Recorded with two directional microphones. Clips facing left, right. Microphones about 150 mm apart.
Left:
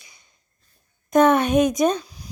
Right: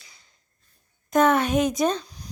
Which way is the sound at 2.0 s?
5° left (ahead or behind).